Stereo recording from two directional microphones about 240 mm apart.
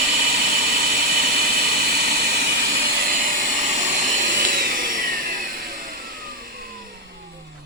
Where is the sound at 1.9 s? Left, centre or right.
Right.